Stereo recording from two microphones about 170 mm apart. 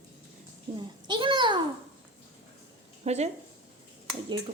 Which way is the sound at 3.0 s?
40° right (ahead or behind).